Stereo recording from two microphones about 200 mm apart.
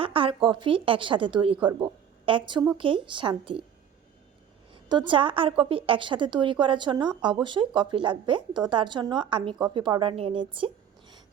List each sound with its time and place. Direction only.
0.0 s a woman's voice: 25° right (ahead or behind)
4.7 s a woman's voice: 25° right (ahead or behind)